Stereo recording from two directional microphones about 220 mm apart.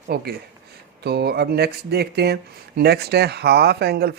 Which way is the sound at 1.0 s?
45° right (ahead or behind).